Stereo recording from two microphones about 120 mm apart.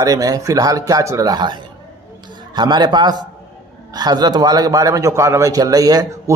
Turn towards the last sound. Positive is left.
turn(degrees=-30)  # may be behind; listen again after turning